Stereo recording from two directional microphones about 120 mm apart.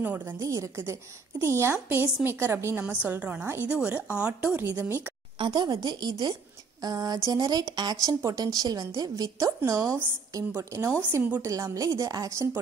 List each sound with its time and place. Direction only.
0.0 s a woman's voice: 15° right (ahead or behind)
5.4 s a woman's voice: 35° right (ahead or behind)